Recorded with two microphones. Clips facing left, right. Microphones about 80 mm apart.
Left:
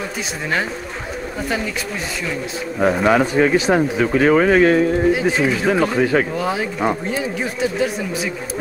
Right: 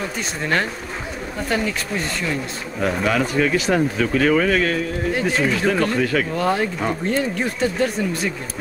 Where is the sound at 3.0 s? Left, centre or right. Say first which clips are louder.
Left 4 dB; left.